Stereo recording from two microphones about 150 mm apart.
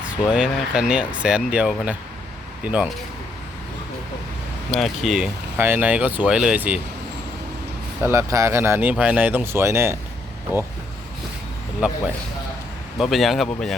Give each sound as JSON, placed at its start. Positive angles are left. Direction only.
{"t": 0.3, "sound": "speech", "side_deg": -5}
{"t": 4.7, "sound": "speech", "side_deg": 0}
{"t": 5.5, "sound": "speech", "side_deg": -15}
{"t": 8.0, "sound": "speech", "side_deg": -20}
{"t": 13.0, "sound": "speech", "side_deg": 0}